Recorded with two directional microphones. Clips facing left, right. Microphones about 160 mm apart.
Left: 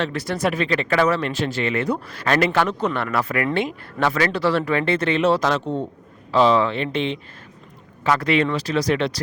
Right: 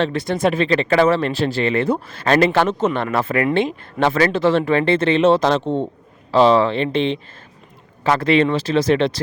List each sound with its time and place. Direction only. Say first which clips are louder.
0.0 s speech: right 4 dB; 25° right (ahead or behind)